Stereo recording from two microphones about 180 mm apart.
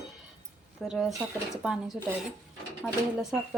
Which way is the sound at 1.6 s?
5° right (ahead or behind).